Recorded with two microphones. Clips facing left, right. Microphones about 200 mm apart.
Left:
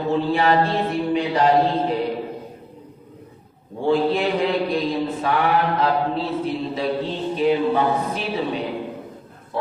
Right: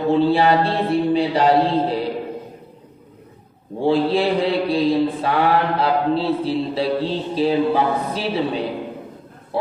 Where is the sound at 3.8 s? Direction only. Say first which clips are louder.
Right 2 dB; 30° right (ahead or behind).